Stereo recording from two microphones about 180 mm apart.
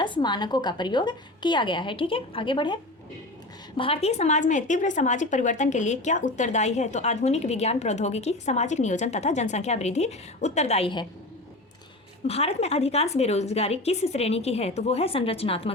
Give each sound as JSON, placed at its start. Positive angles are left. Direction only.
{"t": 0.0, "sound": "a woman's voice", "side_deg": 25}
{"t": 3.8, "sound": "a woman's voice", "side_deg": 30}
{"t": 12.3, "sound": "a woman's voice", "side_deg": 35}